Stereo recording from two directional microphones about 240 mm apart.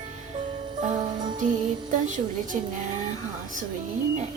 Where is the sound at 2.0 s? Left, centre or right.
Right.